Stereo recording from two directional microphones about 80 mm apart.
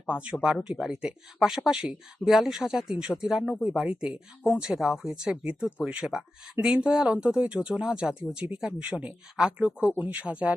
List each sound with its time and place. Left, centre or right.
0.1 s speech: centre